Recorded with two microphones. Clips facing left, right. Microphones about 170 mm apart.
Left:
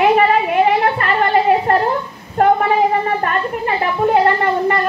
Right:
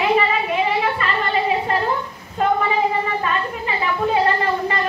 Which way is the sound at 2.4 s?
60° left (ahead or behind).